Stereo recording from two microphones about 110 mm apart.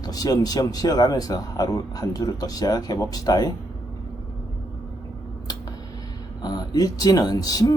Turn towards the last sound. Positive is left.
turn(degrees=35)  # may be behind; listen again after turning